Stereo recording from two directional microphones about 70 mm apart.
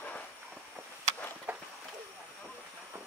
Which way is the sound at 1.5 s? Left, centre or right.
Right.